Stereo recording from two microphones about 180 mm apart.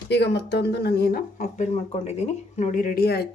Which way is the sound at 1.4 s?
40° left (ahead or behind).